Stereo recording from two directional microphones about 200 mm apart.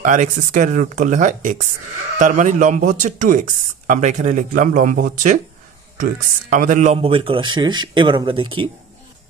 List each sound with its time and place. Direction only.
0.0 s a man's voice: 40° right (ahead or behind)